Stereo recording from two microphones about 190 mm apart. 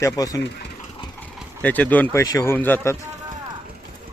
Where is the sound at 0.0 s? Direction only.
20° left (ahead or behind).